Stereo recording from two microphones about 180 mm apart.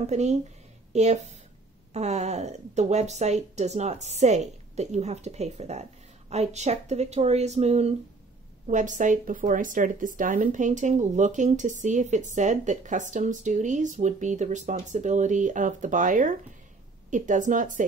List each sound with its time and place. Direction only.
0.0 s a woman's voice: 40° right (ahead or behind)